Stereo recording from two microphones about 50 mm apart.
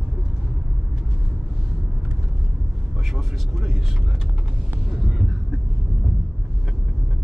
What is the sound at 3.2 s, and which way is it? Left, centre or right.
Speech, centre.